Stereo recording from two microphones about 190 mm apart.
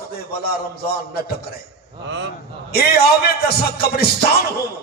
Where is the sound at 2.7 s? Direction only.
55° left (ahead or behind).